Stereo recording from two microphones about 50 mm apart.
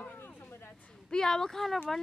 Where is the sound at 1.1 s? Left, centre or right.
Centre.